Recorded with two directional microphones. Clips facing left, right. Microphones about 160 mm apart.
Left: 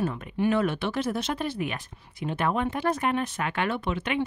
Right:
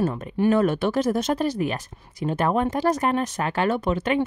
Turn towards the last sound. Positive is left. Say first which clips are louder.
# right 5 dB
turn(degrees=-40)  # may be behind; listen again after turning